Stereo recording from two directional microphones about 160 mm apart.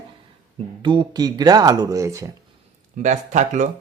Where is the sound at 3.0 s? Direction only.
50° right (ahead or behind).